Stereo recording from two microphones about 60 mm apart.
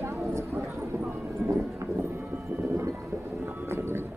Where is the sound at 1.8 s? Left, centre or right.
Right.